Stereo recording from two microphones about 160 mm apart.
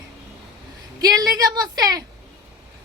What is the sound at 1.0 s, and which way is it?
Speech, 25° right (ahead or behind).